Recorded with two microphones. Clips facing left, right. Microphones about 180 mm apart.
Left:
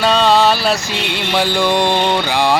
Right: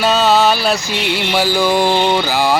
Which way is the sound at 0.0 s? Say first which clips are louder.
Even; 5° right (ahead or behind).